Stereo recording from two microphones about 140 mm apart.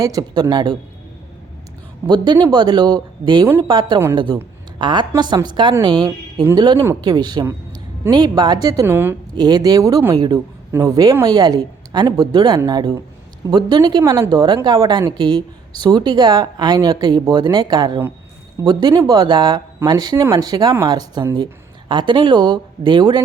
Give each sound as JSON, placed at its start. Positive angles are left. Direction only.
{"t": 0.0, "sound": "a woman's voice", "side_deg": -25}
{"t": 2.0, "sound": "a woman's voice", "side_deg": -30}
{"t": 8.9, "sound": "a woman's voice", "side_deg": -15}
{"t": 9.3, "sound": "a woman's voice", "side_deg": -30}